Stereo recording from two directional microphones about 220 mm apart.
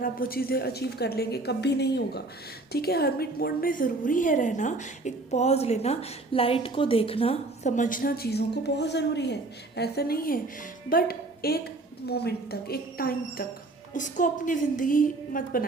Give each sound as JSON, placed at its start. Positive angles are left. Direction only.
{"t": 0.0, "sound": "a woman's voice", "side_deg": 40}